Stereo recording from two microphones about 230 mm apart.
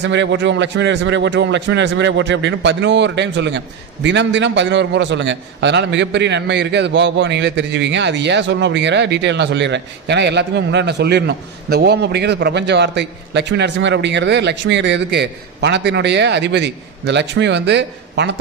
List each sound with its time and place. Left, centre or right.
0.0 s a man's voice: right